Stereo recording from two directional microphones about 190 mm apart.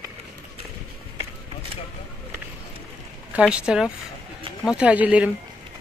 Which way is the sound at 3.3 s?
5° right (ahead or behind).